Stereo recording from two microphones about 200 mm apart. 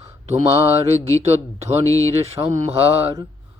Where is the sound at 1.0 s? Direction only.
15° left (ahead or behind).